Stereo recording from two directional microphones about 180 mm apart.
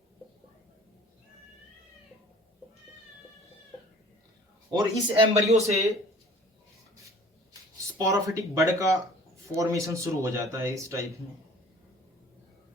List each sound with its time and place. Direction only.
4.7 s speech: 25° right (ahead or behind)
7.9 s speech: 20° right (ahead or behind)